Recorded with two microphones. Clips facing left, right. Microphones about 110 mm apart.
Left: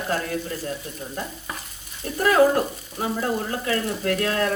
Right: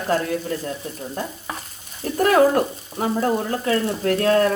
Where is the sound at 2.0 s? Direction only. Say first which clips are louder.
Right 4 dB; 40° right (ahead or behind).